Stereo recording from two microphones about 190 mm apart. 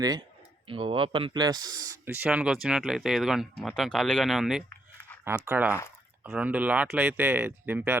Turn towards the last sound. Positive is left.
turn(degrees=-10)  # may be behind; listen again after turning